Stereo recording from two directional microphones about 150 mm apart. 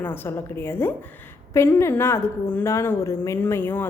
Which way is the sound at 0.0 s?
15° left (ahead or behind).